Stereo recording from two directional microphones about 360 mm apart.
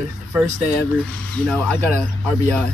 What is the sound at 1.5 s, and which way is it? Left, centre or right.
Speech, centre.